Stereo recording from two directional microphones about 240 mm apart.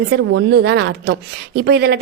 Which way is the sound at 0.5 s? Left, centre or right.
Right.